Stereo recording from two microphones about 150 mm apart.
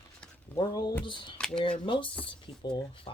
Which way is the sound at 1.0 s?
30° left (ahead or behind).